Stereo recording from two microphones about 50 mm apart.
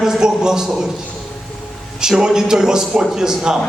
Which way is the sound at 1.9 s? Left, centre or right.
Centre.